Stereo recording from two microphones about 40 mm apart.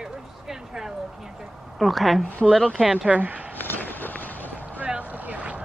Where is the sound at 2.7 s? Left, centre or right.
Centre.